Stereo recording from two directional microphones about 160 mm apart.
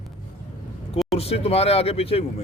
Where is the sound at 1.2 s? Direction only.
40° left (ahead or behind).